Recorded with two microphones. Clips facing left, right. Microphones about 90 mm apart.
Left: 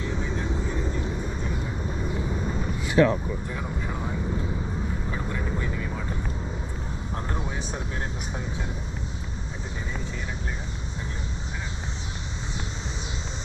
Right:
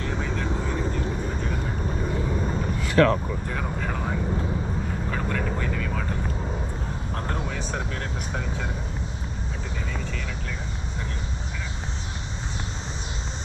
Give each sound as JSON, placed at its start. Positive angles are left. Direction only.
{"t": 0.0, "sound": "vehicle", "side_deg": -60}
{"t": 3.0, "sound": "vehicle", "side_deg": -65}
{"t": 7.2, "sound": "vehicle", "side_deg": -70}